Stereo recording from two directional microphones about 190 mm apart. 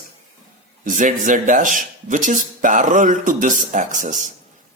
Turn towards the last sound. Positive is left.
turn(degrees=-40)  # may be behind; listen again after turning